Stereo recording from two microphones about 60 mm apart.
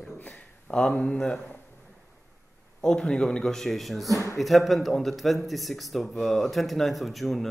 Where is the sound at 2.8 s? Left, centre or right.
Centre.